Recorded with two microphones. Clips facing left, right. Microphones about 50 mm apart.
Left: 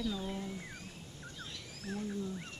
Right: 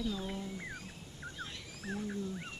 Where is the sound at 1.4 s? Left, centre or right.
Centre.